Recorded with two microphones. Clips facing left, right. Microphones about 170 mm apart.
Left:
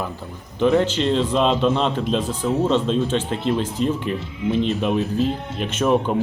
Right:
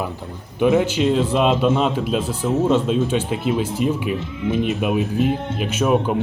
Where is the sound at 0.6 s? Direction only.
10° right (ahead or behind).